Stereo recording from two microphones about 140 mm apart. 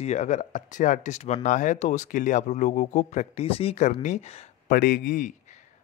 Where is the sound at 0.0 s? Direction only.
55° left (ahead or behind).